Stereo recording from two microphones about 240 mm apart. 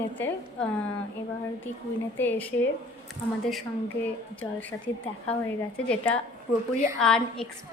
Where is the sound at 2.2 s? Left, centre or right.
Centre.